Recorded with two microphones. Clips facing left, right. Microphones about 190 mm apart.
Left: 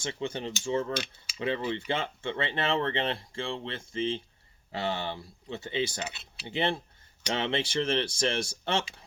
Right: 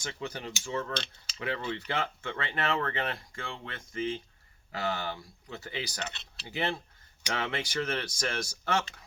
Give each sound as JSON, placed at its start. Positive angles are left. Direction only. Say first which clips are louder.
{"t": 0.0, "sound": "speech", "louder": "left 4 dB", "side_deg": 25}
{"t": 0.9, "sound": "mechanisms", "louder": "left 3 dB", "side_deg": 10}
{"t": 1.4, "sound": "speech", "louder": "left 4 dB", "side_deg": 25}
{"t": 6.0, "sound": "mechanisms", "louder": "left 2 dB", "side_deg": 10}
{"t": 6.4, "sound": "speech", "louder": "left 3 dB", "side_deg": 25}